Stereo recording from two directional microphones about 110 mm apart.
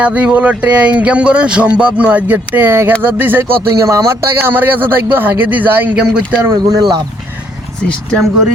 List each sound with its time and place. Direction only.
0.0 s speech: 10° right (ahead or behind)
6.4 s speech: 25° right (ahead or behind)